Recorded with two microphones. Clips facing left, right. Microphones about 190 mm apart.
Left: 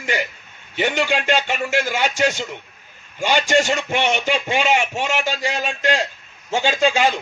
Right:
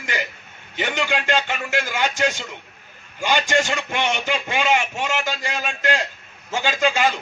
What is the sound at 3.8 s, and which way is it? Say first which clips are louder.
A man's voice: left 3 dB; 20° left (ahead or behind).